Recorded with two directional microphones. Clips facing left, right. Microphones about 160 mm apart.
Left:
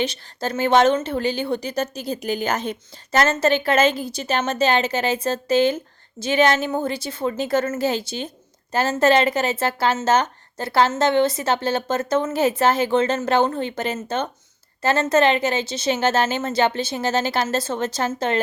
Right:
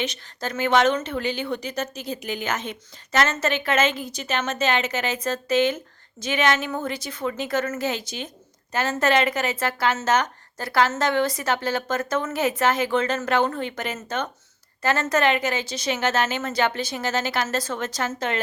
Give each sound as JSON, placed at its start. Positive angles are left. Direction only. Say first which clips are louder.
{"t": 0.0, "sound": "a woman's voice", "louder": "left 4 dB", "side_deg": 30}